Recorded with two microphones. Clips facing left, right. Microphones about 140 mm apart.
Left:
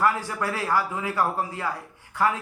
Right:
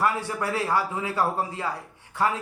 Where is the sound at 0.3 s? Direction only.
25° right (ahead or behind).